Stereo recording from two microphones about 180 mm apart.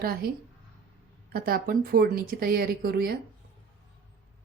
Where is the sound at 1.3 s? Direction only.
55° right (ahead or behind).